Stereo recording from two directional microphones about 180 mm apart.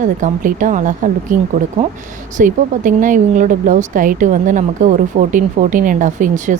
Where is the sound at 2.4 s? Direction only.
45° right (ahead or behind).